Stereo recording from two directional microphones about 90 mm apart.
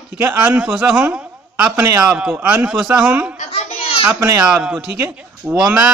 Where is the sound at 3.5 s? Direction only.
90° left.